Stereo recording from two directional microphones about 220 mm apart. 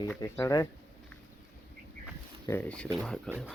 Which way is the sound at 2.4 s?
5° left (ahead or behind).